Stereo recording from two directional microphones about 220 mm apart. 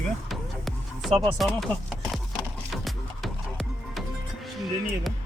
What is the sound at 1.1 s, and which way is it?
Speech, 20° right (ahead or behind).